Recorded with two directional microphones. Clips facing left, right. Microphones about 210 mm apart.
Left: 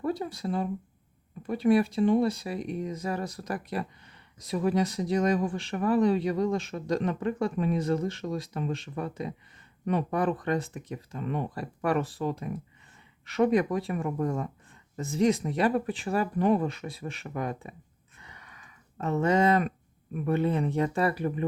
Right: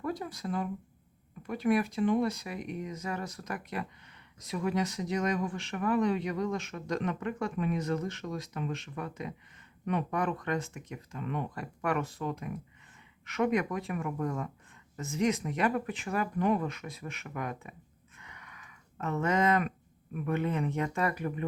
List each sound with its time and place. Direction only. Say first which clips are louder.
0.0 s speech: left 5 dB; 30° left (ahead or behind)
18.2 s a sound: left 1 dB; 30° left (ahead or behind)
20.1 s speech: left 4 dB; 35° left (ahead or behind)